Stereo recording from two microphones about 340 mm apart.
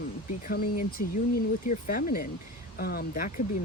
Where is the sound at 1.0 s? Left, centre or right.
Left.